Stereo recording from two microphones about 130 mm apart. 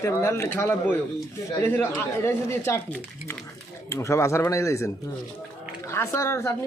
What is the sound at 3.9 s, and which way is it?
Speech, 20° left (ahead or behind).